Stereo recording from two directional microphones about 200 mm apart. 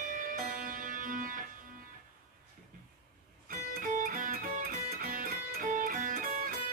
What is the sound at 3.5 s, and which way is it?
Music, 45° right (ahead or behind).